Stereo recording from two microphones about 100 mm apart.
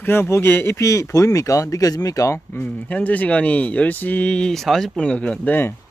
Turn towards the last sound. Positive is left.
turn(degrees=20)  # may be behind; listen again after turning